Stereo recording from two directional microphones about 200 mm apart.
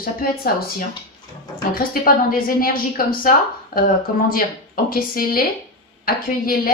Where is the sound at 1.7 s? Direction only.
45° left (ahead or behind).